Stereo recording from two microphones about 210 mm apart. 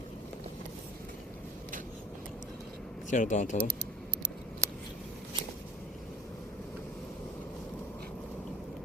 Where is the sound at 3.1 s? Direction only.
35° left (ahead or behind).